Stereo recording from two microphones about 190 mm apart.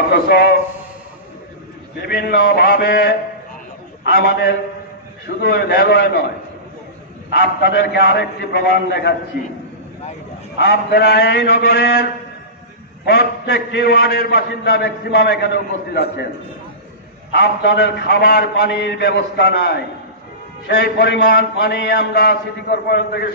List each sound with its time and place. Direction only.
0.1 s a man's voice: 55° left (ahead or behind)
2.0 s a man's voice: 55° left (ahead or behind)
7.2 s a man's voice: 55° left (ahead or behind)
10.6 s a man's voice: 55° left (ahead or behind)
17.3 s a man's voice: 65° left (ahead or behind)